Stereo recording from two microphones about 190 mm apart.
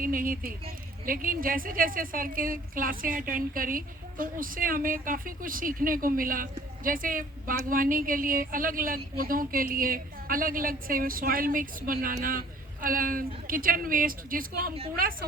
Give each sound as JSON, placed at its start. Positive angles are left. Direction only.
{"t": 0.0, "sound": "a woman's voice", "side_deg": -45}